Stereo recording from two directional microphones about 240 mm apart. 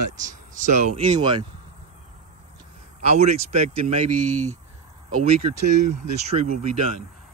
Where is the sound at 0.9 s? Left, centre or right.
Right.